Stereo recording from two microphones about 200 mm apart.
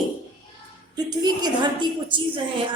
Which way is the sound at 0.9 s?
20° right (ahead or behind).